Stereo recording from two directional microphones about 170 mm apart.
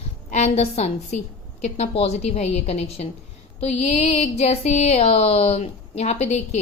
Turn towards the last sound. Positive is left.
turn(degrees=40)  # may be behind; listen again after turning